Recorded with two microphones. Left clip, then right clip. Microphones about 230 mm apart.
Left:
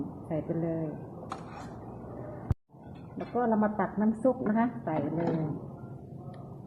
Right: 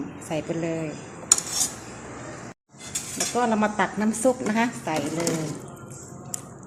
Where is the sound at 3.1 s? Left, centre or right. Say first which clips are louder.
Right 5 dB; right.